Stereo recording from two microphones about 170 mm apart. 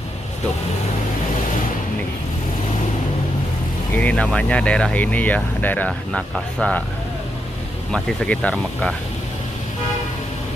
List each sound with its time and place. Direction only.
3.9 s speech: 10° left (ahead or behind)
7.9 s speech: 5° left (ahead or behind)